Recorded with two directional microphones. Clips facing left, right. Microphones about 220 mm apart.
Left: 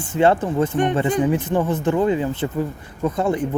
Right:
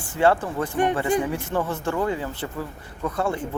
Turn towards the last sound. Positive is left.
turn(degrees=20)  # may be behind; listen again after turning